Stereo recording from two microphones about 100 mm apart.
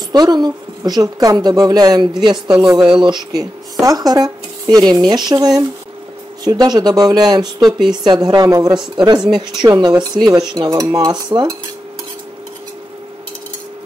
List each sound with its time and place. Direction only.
0.1 s a woman's voice: 45° right (ahead or behind)
3.8 s a woman's voice: 40° right (ahead or behind)
8.9 s a woman's voice: 45° right (ahead or behind)
9.2 s speech: 5° right (ahead or behind)
9.7 s a woman's voice: 45° right (ahead or behind)